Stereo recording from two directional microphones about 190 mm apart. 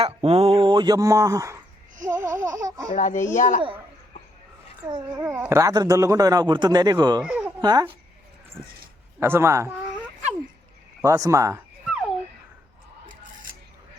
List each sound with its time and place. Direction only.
0.0 s a man's voice: 30° right (ahead or behind)
2.0 s laughter: 15° right (ahead or behind)
2.9 s a child's voice: 40° left (ahead or behind)
4.9 s a man's voice: 25° right (ahead or behind)
5.3 s a man's voice: 15° right (ahead or behind)
7.2 s speech: 5° right (ahead or behind)
7.6 s a man's voice: 20° right (ahead or behind)
9.2 s laughter: 15° right (ahead or behind)
11.0 s laughter: 15° right (ahead or behind)